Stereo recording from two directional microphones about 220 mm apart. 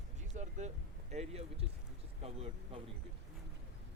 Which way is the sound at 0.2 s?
35° right (ahead or behind).